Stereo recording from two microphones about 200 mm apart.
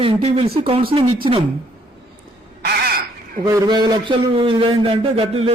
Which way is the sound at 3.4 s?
20° right (ahead or behind).